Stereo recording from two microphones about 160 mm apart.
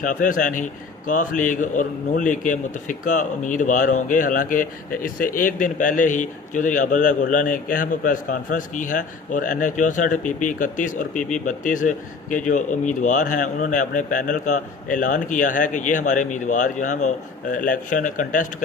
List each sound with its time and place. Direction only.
0.0 s speech: 55° left (ahead or behind)